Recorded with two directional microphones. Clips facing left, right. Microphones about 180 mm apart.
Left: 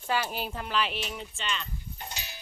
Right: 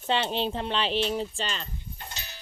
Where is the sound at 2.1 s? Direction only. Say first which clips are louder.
Left 1 dB; 15° left (ahead or behind).